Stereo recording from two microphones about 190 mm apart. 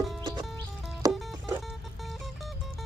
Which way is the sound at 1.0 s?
20° right (ahead or behind).